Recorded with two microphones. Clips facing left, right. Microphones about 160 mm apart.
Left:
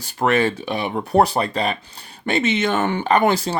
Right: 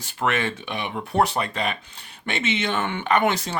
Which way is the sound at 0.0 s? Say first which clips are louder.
Left 6 dB; 40° left (ahead or behind).